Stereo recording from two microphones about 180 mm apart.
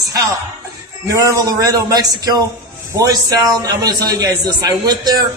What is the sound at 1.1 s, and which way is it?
A man's voice, 20° right (ahead or behind).